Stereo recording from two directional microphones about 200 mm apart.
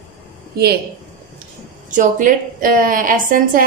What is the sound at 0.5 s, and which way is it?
Speech, 50° right (ahead or behind).